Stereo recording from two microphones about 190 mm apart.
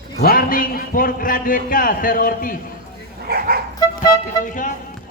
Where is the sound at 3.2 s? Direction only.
55° right (ahead or behind).